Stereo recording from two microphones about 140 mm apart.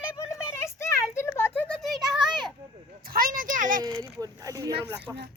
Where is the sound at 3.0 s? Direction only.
90° right; by 3.8 s 75° right (ahead or behind).